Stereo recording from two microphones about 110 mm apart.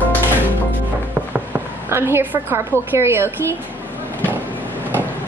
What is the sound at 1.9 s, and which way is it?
A woman's voice, 20° right (ahead or behind).